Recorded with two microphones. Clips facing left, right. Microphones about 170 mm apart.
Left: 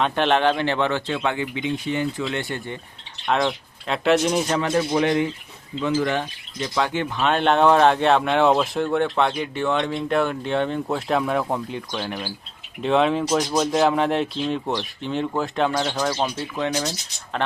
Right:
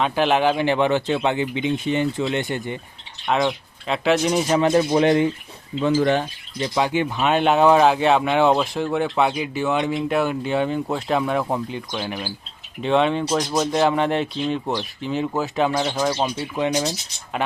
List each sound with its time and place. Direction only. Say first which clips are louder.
0.0 s speech: right 1 dB; 5° right (ahead or behind)
3.2 s speech: right 1 dB; centre (ahead or behind)
4.5 s speech: right 4 dB; 20° right (ahead or behind)
6.7 s speech: right 2 dB; 10° right (ahead or behind)
15.7 s speech: right 2 dB; 15° right (ahead or behind)